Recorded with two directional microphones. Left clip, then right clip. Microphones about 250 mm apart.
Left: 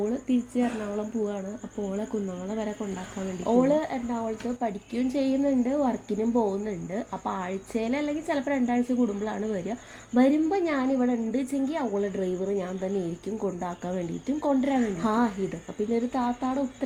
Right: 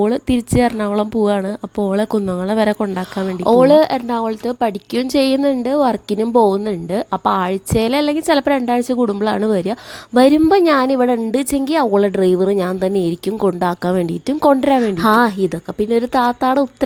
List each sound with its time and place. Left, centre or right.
0.0 s speech: right
2.5 s a woman's voice: right